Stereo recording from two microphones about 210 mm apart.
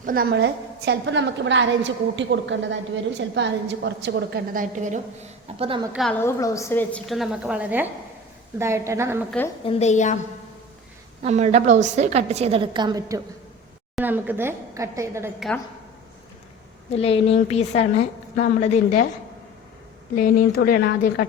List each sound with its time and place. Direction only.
0.0 s a woman's voice: 45° right (ahead or behind); by 5.8 s 25° right (ahead or behind)
5.9 s a woman's voice: centre (ahead or behind)
9.6 s a woman's voice: 30° left (ahead or behind)
11.2 s a woman's voice: 30° right (ahead or behind); by 15.3 s 15° right (ahead or behind)
16.9 s a woman's voice: 30° left (ahead or behind)
20.1 s speech: 45° left (ahead or behind)